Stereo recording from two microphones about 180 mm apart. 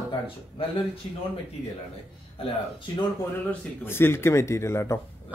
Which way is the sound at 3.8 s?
15° left (ahead or behind).